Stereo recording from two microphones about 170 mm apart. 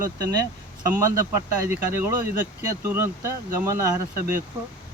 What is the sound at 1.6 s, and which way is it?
Speech, 15° right (ahead or behind).